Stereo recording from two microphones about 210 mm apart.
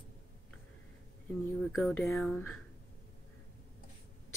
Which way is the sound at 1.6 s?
Centre (ahead or behind).